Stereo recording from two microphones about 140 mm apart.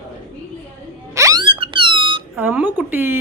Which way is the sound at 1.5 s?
40° right (ahead or behind).